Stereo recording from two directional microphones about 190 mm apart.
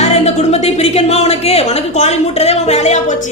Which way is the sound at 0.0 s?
35° left (ahead or behind).